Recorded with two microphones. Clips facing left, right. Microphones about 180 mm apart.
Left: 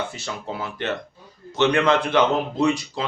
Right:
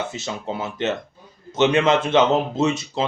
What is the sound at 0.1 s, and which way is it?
Speech, 20° right (ahead or behind).